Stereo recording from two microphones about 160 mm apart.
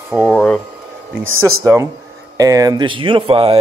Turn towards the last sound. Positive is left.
turn(degrees=-35)  # may be behind; listen again after turning